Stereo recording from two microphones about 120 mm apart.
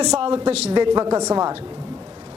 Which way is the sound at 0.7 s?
40° right (ahead or behind).